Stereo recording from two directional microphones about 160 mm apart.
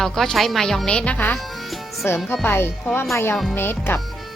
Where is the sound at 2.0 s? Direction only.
15° left (ahead or behind).